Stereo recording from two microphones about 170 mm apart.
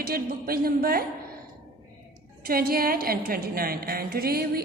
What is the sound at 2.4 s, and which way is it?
A woman's voice, 60° right (ahead or behind).